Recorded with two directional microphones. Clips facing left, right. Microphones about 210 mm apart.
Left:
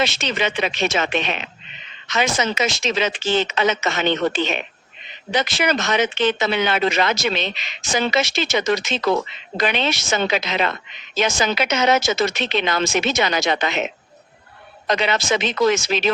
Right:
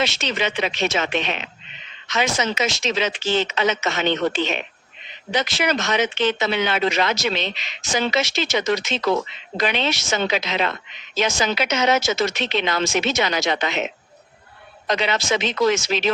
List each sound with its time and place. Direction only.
0.0 s speech: 55° left (ahead or behind)
14.8 s speech: 55° left (ahead or behind)